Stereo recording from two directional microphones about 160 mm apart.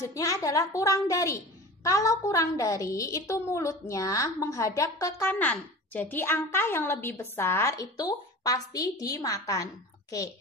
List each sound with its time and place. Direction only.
0.0 s a woman's voice: 20° left (ahead or behind)